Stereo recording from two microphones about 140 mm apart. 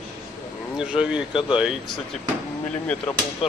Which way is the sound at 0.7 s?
5° right (ahead or behind).